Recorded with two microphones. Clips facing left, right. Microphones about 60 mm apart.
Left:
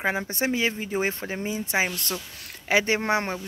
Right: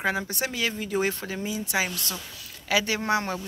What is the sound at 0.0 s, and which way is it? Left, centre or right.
A man's voice, left.